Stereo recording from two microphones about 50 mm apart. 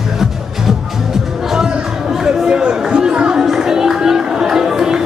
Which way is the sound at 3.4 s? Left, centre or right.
Centre.